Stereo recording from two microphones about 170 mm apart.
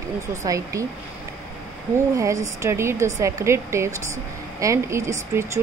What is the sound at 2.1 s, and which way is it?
Speech, 20° right (ahead or behind).